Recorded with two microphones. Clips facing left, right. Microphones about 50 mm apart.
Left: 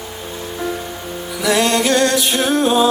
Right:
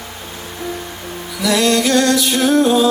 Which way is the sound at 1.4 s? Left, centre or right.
Left.